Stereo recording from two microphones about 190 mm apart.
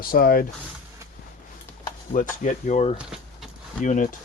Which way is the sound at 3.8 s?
45° left (ahead or behind).